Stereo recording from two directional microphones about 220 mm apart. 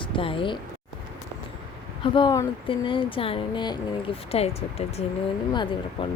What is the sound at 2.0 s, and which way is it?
Speech, 20° left (ahead or behind).